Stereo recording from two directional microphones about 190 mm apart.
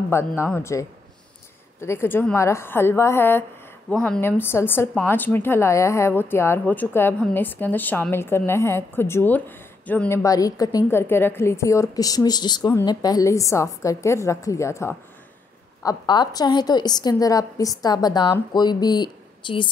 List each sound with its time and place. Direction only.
0.1 s a woman's voice: 15° left (ahead or behind)